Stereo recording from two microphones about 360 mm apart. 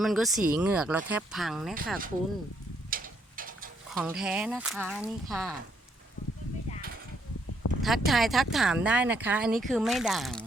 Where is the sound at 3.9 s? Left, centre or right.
Centre.